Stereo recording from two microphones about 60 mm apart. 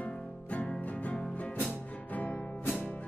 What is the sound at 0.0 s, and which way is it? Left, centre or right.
Music, left.